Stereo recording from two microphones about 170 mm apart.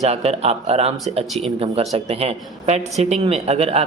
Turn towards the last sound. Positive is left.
turn(degrees=-35)  # may be behind; listen again after turning